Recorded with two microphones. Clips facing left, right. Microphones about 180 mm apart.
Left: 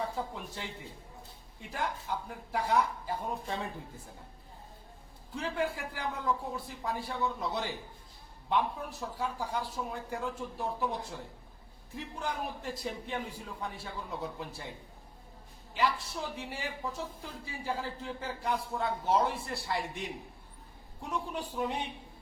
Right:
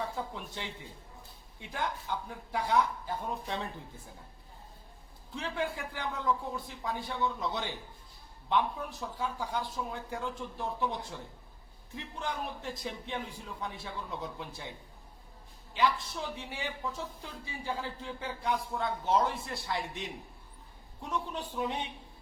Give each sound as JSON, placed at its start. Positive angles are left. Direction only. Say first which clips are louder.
{"t": 0.0, "sound": "a woman's voice", "louder": "left 1 dB", "side_deg": 0}
{"t": 5.3, "sound": "a woman's voice", "louder": "left 2 dB", "side_deg": 5}
{"t": 15.7, "sound": "a woman's voice", "louder": "right 1 dB", "side_deg": 5}